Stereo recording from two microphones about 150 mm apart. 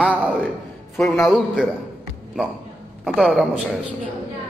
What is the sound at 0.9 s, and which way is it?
Speech, 5° left (ahead or behind).